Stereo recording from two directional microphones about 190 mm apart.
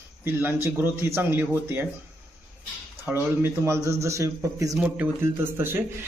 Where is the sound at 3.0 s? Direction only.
10° right (ahead or behind).